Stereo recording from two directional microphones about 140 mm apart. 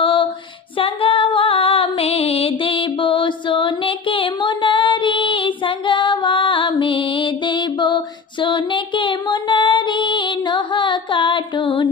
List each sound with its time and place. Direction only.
0.0 s music: 35° left (ahead or behind)
0.7 s female singing: 40° left (ahead or behind)